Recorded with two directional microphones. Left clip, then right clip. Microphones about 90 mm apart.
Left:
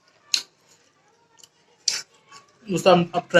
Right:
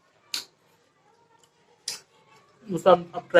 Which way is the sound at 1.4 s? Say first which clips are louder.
Left 12 dB; 30° left (ahead or behind).